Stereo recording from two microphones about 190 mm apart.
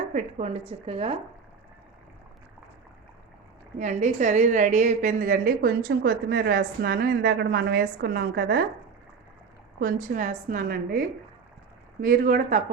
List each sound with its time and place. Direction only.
0.1 s a woman's voice: 35° right (ahead or behind)
3.8 s a woman's voice: 40° right (ahead or behind)
9.8 s a woman's voice: 45° right (ahead or behind)
12.0 s a woman's voice: 50° right (ahead or behind)